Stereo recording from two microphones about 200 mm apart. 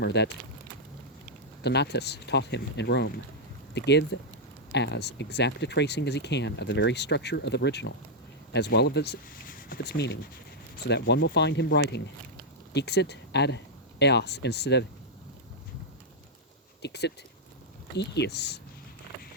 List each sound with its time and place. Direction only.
0.0 s speech: 60° left (ahead or behind)
1.6 s speech: 55° left (ahead or behind)
16.8 s speech: 55° left (ahead or behind)